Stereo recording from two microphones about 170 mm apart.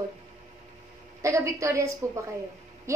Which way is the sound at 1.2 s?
15° right (ahead or behind).